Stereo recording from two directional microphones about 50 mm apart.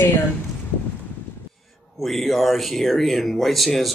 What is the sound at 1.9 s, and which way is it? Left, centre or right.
Speech, centre.